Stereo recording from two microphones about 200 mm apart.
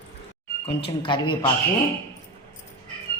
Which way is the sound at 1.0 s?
25° left (ahead or behind).